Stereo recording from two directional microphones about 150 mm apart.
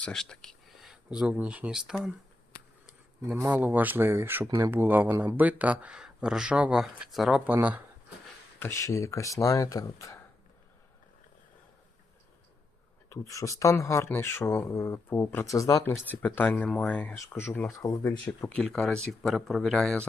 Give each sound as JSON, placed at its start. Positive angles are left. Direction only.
{"t": 0.0, "sound": "speech", "side_deg": 5}
{"t": 8.5, "sound": "speech", "side_deg": 15}
{"t": 13.1, "sound": "speech", "side_deg": 20}
{"t": 15.9, "sound": "speech", "side_deg": 10}
{"t": 18.4, "sound": "a man's voice", "side_deg": 5}